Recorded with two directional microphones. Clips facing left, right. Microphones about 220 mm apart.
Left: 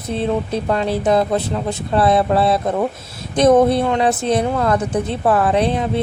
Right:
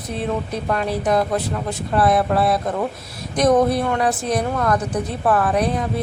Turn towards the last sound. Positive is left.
turn(degrees=25)  # may be behind; listen again after turning